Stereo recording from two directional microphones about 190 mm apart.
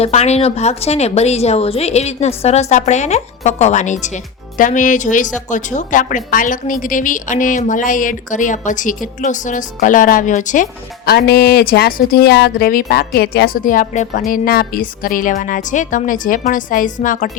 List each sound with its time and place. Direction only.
0.0 s a woman's voice: 35° left (ahead or behind)